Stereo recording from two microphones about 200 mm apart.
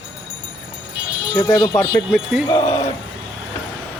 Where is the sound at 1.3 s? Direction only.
20° left (ahead or behind).